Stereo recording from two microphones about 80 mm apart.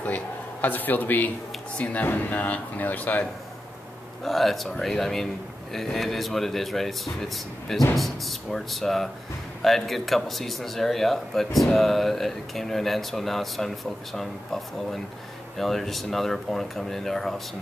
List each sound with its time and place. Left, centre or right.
0.0 s a sound: left
1.8 s speech: centre
4.2 s speech: centre